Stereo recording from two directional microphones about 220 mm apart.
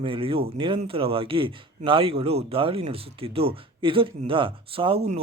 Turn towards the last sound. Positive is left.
turn(degrees=-25)  # may be behind; listen again after turning